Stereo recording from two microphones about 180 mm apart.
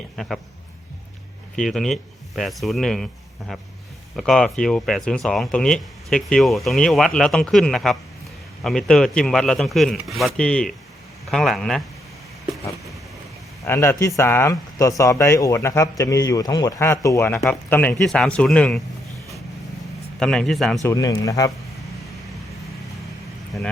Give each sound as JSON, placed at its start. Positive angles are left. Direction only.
{"t": 0.2, "sound": "speech", "side_deg": 5}
{"t": 1.5, "sound": "speech", "side_deg": 0}
{"t": 13.7, "sound": "speech", "side_deg": 15}
{"t": 20.1, "sound": "speech", "side_deg": 5}
{"t": 20.8, "sound": "speech", "side_deg": 15}